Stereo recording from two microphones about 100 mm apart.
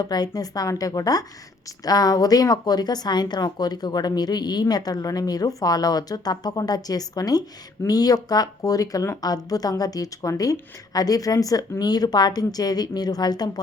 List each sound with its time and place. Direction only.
0.0 s a woman's voice: 40° left (ahead or behind)